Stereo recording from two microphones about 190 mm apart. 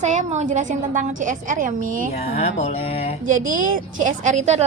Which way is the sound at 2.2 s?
35° left (ahead or behind).